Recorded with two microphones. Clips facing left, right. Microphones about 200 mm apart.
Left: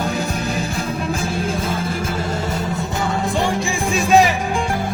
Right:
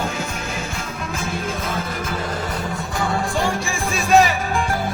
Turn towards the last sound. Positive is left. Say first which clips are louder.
# left 3 dB
turn(degrees=0)  # may be behind; listen again after turning